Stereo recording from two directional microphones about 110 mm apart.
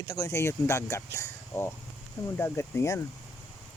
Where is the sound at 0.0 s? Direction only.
35° left (ahead or behind).